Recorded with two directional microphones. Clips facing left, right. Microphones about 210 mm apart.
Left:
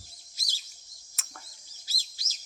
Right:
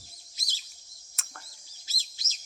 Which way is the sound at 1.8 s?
20° right (ahead or behind).